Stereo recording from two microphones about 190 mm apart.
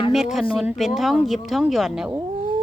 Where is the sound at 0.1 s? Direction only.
Centre (ahead or behind).